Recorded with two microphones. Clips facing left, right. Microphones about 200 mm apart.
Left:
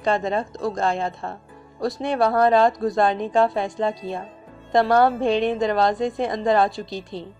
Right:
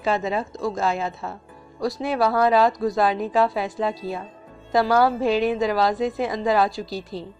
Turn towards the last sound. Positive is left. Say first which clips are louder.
# right 1 dB
turn(degrees=0)  # may be behind; listen again after turning